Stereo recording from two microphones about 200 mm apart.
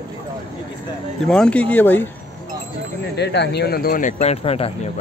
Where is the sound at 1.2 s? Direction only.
5° left (ahead or behind).